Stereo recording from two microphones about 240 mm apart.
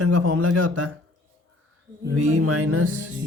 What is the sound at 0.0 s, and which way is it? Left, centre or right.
Speech, right.